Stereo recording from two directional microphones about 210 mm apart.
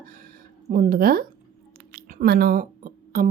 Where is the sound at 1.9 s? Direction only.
45° right (ahead or behind).